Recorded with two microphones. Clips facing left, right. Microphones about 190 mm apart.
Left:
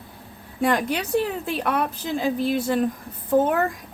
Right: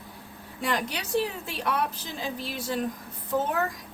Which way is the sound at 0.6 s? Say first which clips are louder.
Left 8 dB; 50° left (ahead or behind).